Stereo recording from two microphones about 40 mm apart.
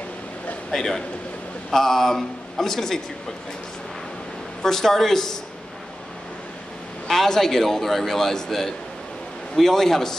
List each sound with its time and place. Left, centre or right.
0.7 s a man's voice: centre
4.6 s a man's voice: centre
7.1 s a man's voice: centre